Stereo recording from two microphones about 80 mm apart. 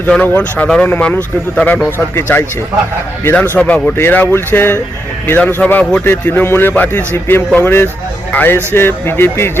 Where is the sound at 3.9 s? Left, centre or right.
Left.